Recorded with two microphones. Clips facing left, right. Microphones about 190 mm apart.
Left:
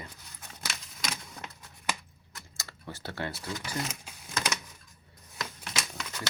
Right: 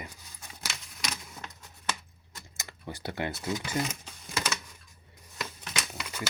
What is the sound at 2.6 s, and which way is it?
Speech, 15° right (ahead or behind).